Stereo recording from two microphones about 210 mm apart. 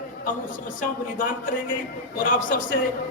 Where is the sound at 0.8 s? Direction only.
40° left (ahead or behind).